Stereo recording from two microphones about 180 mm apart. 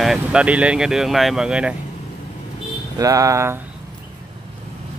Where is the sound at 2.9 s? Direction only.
20° right (ahead or behind).